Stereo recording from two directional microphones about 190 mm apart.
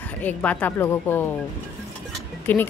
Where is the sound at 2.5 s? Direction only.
10° left (ahead or behind).